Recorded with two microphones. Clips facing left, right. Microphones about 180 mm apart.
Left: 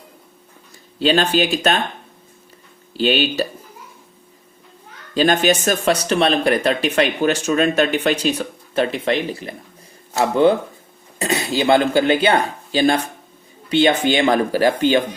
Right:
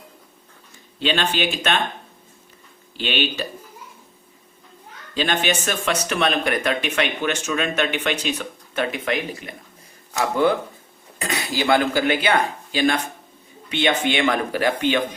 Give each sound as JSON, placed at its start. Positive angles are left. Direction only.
{"t": 0.9, "sound": "speech", "side_deg": 40}
{"t": 3.0, "sound": "speech", "side_deg": 40}
{"t": 5.1, "sound": "speech", "side_deg": 40}